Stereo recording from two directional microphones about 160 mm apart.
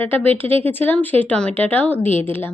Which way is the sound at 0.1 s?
10° left (ahead or behind).